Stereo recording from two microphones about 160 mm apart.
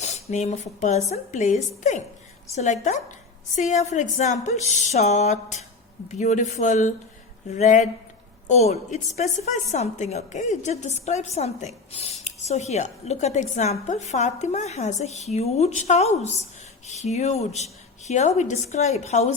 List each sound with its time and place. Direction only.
0.0 s a woman's voice: 45° left (ahead or behind)